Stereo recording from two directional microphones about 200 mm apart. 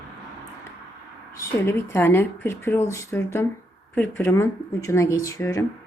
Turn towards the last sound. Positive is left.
turn(degrees=15)  # may be behind; listen again after turning